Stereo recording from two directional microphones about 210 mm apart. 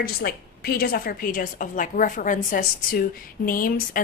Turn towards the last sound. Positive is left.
turn(degrees=40)  # may be behind; listen again after turning